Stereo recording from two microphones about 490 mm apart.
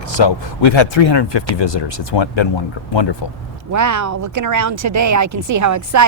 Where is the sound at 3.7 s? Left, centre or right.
Right.